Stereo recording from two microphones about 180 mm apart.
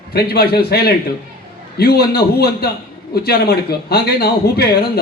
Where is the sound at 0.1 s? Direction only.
60° left (ahead or behind).